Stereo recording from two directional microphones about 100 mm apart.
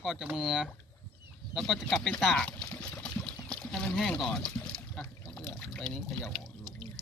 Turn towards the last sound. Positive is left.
turn(degrees=5)  # may be behind; listen again after turning